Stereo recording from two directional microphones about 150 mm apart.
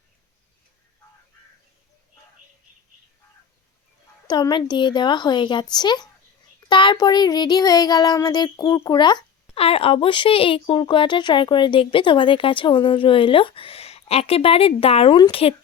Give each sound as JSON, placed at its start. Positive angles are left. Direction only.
{"t": 4.3, "sound": "speech", "side_deg": 30}
{"t": 9.6, "sound": "speech", "side_deg": 40}